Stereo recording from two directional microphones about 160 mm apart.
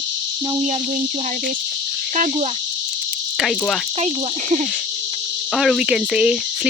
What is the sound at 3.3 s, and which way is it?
Cricket, centre (ahead or behind).